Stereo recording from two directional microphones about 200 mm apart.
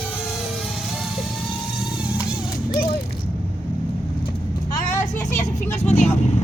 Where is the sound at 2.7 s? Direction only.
50° left (ahead or behind).